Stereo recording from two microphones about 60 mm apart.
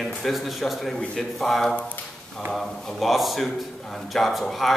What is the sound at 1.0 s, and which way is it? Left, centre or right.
A man's voice, centre.